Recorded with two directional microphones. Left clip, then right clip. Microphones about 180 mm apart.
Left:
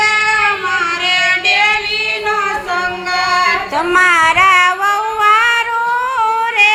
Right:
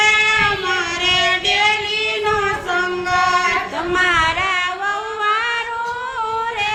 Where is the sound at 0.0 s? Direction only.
90° right.